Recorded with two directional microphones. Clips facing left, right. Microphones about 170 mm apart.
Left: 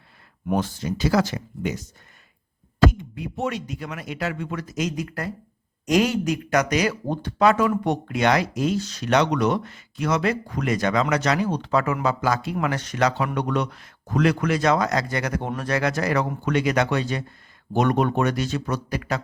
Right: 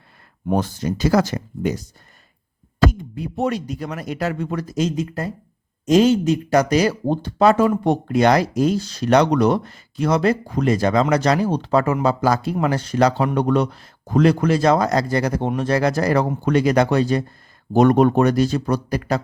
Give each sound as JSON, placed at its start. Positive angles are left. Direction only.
{"t": 0.4, "sound": "speech", "side_deg": -40}
{"t": 3.0, "sound": "speech", "side_deg": -35}